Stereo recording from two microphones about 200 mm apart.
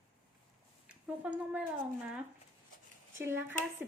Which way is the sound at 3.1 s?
10° right (ahead or behind).